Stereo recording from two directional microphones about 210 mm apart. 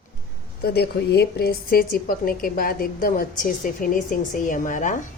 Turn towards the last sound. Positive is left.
turn(degrees=35)  # may be behind; listen again after turning